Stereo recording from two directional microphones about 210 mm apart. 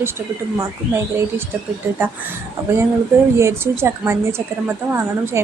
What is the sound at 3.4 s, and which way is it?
A woman's voice, 10° right (ahead or behind).